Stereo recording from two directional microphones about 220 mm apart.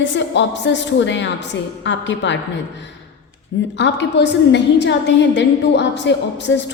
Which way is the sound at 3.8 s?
55° left (ahead or behind).